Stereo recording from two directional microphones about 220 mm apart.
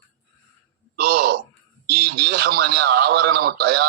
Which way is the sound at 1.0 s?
45° right (ahead or behind).